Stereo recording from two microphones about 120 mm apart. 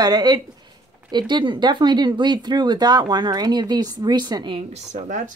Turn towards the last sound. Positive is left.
turn(degrees=-90)